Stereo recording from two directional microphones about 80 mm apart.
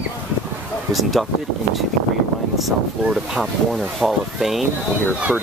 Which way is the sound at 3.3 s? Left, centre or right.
Centre.